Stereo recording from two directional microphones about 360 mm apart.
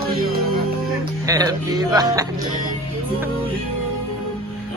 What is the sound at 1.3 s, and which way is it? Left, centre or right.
Speech, centre.